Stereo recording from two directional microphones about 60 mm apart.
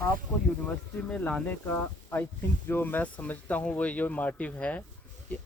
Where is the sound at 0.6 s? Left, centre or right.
Centre.